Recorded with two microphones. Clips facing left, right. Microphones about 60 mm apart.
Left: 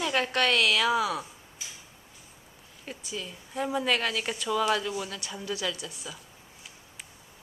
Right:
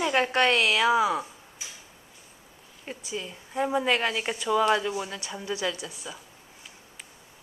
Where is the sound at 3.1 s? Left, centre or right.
Right.